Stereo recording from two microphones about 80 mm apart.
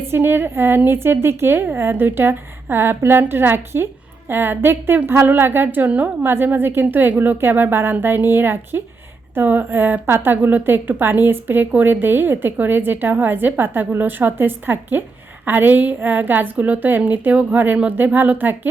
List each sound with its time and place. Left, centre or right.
0.1 s a woman's voice: right